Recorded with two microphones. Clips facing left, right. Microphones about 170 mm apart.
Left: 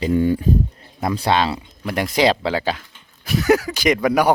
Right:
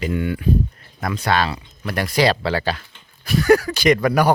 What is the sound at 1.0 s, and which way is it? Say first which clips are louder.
Speech: left 2 dB; 25° left (ahead or behind).